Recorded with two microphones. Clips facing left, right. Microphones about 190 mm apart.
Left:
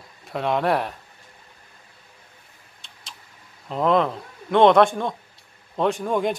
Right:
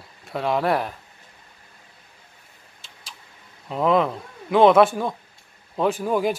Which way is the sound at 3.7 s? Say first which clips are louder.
Even; 5° right (ahead or behind).